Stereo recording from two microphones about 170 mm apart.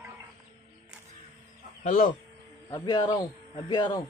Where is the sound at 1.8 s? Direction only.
55° left (ahead or behind).